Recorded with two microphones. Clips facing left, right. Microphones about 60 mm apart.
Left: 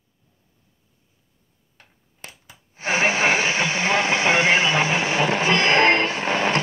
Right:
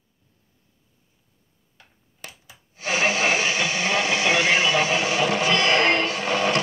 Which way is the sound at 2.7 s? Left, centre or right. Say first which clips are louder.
Left 2 dB; left.